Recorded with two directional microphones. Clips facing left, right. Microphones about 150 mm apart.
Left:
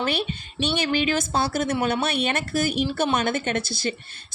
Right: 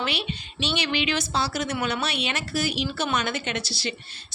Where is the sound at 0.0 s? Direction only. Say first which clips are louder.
Left 4 dB; 50° left (ahead or behind).